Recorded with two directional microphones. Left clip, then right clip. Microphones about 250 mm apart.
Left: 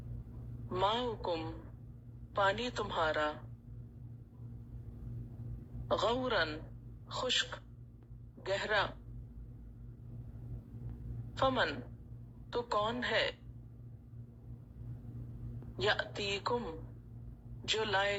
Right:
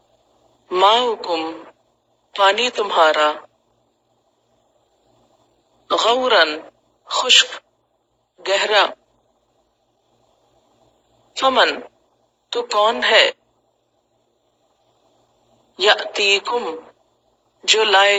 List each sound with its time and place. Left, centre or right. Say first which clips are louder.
0.7 s a woman's voice: right 19 dB; right
5.9 s a woman's voice: right 17 dB; right
11.3 s a woman's voice: right 17 dB; right
15.7 s a woman's voice: right 18 dB; right